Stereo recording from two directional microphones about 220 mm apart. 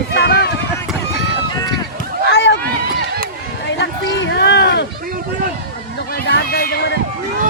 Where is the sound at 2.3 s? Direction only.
50° left (ahead or behind).